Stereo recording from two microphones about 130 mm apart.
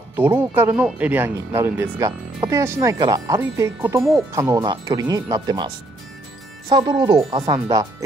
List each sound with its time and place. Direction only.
0.1 s speech: 15° right (ahead or behind)
6.7 s speech: 35° right (ahead or behind)